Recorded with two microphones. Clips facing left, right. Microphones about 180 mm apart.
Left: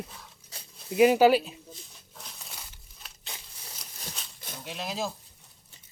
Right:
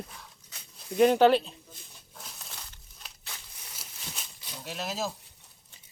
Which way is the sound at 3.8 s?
5° right (ahead or behind).